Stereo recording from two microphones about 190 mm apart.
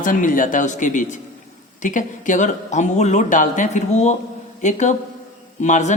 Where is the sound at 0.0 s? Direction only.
45° left (ahead or behind).